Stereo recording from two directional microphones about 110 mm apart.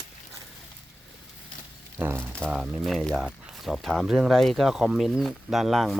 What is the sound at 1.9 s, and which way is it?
Speech, 20° right (ahead or behind).